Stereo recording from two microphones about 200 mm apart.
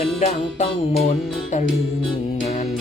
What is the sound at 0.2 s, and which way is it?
Music, 30° left (ahead or behind).